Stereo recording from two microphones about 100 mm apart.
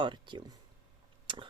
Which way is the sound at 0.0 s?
50° right (ahead or behind).